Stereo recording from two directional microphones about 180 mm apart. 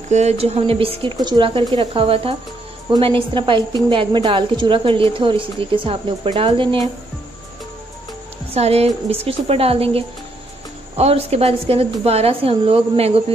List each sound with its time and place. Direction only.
0.1 s a woman's voice: 35° right (ahead or behind)
8.5 s a woman's voice: 35° right (ahead or behind)